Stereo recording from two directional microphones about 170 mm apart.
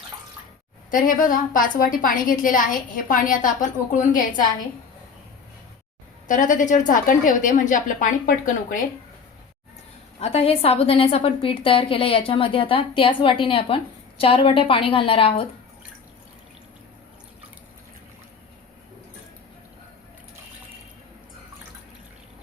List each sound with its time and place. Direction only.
0.9 s a woman's voice: 55° left (ahead or behind)
6.2 s a woman's voice: 50° left (ahead or behind)
10.2 s a woman's voice: 35° left (ahead or behind)